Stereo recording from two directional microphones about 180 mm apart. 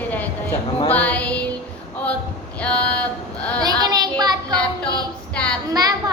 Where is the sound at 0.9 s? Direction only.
10° left (ahead or behind).